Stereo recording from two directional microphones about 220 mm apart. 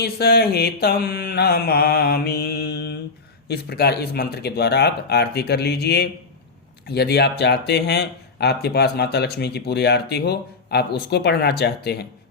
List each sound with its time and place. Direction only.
0.0 s speech: 45° left (ahead or behind)